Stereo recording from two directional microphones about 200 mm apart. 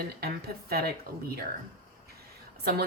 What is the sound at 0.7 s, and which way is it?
Speech, 50° right (ahead or behind).